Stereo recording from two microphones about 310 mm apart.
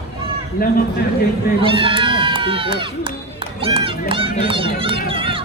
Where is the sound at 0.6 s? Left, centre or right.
Left.